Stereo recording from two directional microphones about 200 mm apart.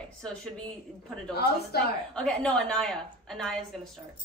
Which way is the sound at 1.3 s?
50° left (ahead or behind).